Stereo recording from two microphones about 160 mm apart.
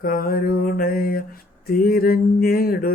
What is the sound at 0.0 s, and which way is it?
Mantra, 65° left (ahead or behind).